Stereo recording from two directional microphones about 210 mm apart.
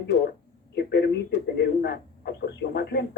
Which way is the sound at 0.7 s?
55° left (ahead or behind).